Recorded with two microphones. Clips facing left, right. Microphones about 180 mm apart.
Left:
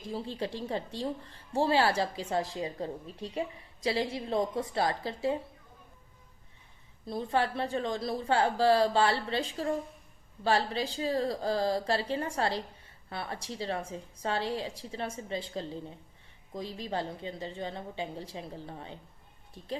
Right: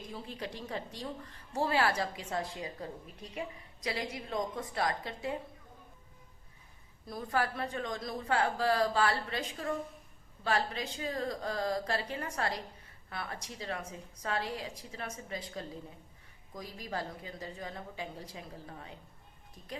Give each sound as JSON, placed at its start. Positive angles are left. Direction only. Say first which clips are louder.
{"t": 0.1, "sound": "a woman's voice", "louder": "left 8 dB", "side_deg": 30}
{"t": 7.0, "sound": "a woman's voice", "louder": "left 4 dB", "side_deg": 25}